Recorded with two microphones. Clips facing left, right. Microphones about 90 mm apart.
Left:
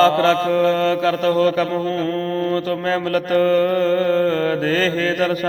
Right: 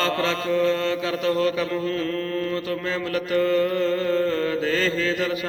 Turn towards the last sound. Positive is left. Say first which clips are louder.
# left 5 dB
turn(degrees=45)  # may be behind; listen again after turning